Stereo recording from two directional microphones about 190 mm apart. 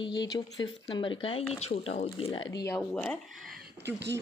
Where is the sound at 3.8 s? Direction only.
65° right (ahead or behind).